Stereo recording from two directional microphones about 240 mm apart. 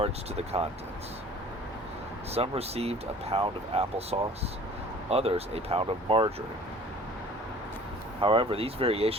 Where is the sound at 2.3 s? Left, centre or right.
Right.